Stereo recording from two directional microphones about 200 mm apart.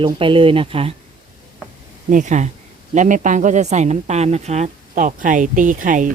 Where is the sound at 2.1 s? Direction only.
40° right (ahead or behind).